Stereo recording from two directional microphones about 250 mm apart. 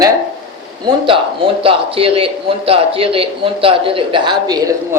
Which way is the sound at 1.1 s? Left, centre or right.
Right.